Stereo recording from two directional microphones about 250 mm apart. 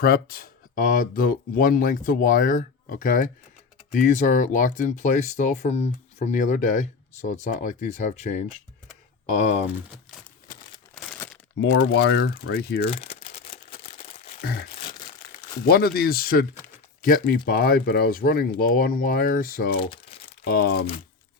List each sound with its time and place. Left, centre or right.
0.0 s speech: left
10.9 s crumpling: centre
11.5 s speech: left
12.9 s crumpling: left
15.6 s speech: left